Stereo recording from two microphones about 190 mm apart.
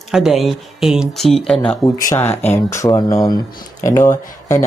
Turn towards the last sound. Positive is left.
turn(degrees=15)  # may be behind; listen again after turning